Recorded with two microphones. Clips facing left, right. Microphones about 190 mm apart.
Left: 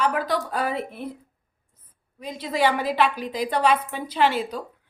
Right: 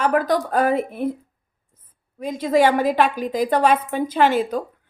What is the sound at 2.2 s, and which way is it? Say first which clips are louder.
Speech: right 6 dB; 50° right (ahead or behind).